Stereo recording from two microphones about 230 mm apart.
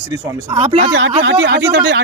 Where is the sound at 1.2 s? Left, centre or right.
Right.